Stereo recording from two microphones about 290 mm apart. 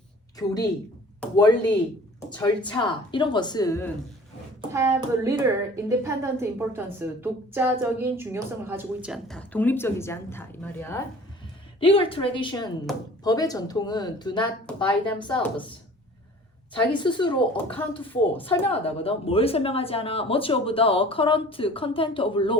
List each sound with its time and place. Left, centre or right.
0.3 s speech: centre
4.7 s a child's voice: centre
11.8 s speech: centre
16.7 s speech: centre